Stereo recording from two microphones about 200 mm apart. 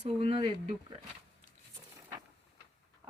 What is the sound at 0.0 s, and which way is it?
Speech, 30° right (ahead or behind).